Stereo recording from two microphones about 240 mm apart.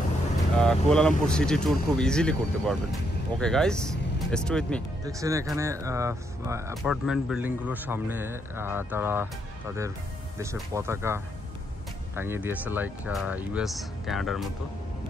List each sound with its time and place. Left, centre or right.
0.6 s speech: centre
5.0 s a man's voice: centre
6.7 s a man's voice: centre
10.4 s a man's voice: centre
12.2 s speech: centre